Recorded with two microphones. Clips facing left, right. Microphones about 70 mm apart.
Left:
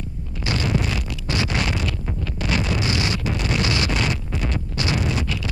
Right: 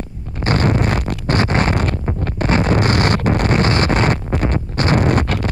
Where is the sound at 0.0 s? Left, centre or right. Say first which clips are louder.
Right 6 dB; right.